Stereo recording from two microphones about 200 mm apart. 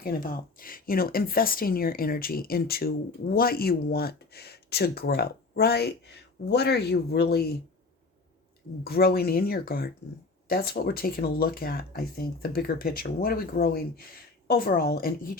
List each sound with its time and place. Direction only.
0.0 s speech: 45° left (ahead or behind)
8.8 s speech: 50° left (ahead or behind)